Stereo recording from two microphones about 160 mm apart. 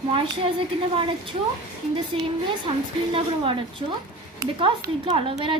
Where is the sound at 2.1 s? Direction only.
35° right (ahead or behind).